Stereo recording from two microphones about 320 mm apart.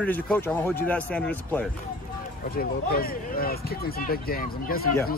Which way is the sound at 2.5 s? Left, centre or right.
Left.